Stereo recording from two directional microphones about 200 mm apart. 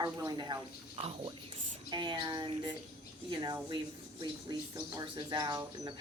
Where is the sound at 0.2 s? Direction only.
20° right (ahead or behind).